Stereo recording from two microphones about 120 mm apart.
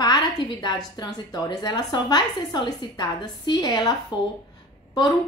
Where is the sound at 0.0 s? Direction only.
35° left (ahead or behind).